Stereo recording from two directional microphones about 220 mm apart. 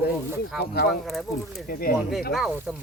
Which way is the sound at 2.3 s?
5° right (ahead or behind).